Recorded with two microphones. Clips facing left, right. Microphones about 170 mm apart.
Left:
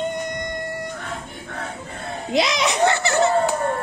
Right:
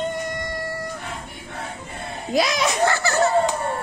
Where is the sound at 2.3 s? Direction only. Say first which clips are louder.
Left 1 dB; 20° left (ahead or behind).